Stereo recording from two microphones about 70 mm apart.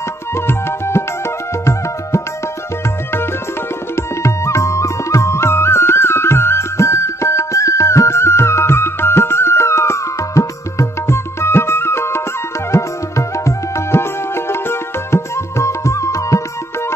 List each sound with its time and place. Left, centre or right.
0.3 s music: left
3.9 s music: left